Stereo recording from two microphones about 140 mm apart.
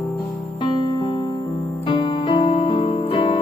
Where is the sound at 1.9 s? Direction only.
35° left (ahead or behind).